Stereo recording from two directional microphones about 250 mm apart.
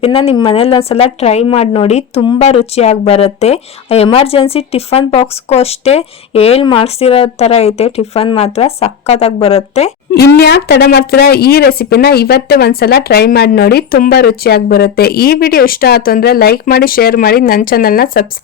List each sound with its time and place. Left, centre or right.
0.0 s speech: left
10.2 s speech: left